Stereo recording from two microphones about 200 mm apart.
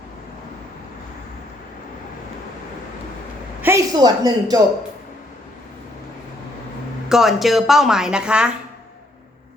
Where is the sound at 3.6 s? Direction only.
15° right (ahead or behind).